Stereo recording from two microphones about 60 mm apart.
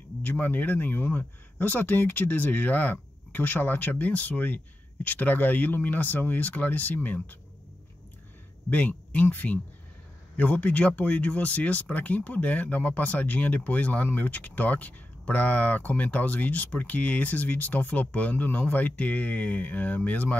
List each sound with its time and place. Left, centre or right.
0.2 s speech: left
8.6 s speech: left